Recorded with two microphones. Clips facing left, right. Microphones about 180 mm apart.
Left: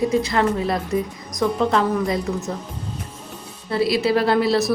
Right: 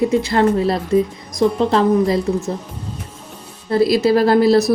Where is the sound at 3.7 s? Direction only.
40° right (ahead or behind).